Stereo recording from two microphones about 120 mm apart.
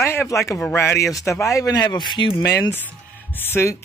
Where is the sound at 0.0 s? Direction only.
20° left (ahead or behind); by 2.3 s 40° left (ahead or behind).